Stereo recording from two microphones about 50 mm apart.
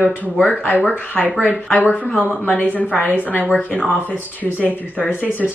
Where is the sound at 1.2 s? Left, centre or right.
Right.